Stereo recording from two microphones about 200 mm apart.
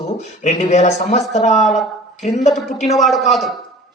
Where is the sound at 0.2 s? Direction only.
35° left (ahead or behind).